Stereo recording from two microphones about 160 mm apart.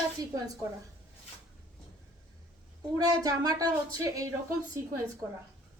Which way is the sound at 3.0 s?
25° right (ahead or behind).